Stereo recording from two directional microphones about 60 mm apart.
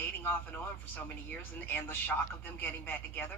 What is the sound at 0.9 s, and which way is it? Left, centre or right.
A woman's voice, left.